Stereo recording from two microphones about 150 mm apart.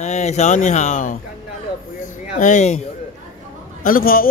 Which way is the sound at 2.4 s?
50° left (ahead or behind).